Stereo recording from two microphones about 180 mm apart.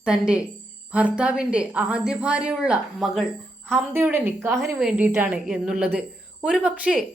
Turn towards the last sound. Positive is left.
turn(degrees=-5)  # may be behind; listen again after turning